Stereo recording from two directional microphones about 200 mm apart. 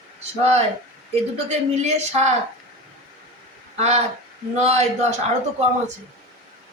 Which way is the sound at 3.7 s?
30° right (ahead or behind).